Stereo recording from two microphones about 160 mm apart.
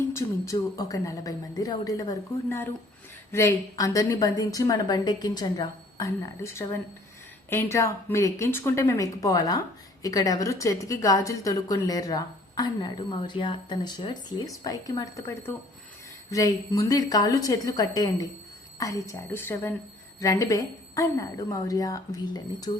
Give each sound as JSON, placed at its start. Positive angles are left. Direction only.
{"t": 0.1, "sound": "a woman's voice", "side_deg": 20}